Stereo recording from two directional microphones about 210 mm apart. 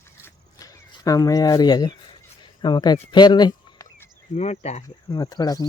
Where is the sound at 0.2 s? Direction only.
15° left (ahead or behind).